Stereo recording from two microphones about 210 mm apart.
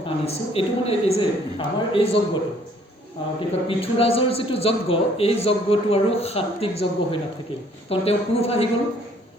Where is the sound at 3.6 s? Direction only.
25° left (ahead or behind).